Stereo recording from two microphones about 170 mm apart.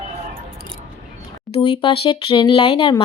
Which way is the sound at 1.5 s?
30° left (ahead or behind).